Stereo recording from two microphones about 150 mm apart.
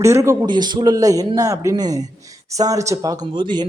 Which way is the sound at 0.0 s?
20° right (ahead or behind).